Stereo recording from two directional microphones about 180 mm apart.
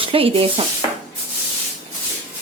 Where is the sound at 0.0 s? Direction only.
30° right (ahead or behind).